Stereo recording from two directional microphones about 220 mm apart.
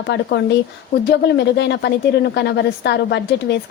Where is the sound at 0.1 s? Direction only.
50° left (ahead or behind).